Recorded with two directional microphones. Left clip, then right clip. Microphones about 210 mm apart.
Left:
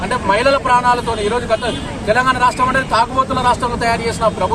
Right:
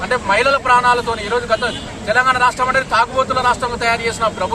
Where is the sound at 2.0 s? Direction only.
5° left (ahead or behind).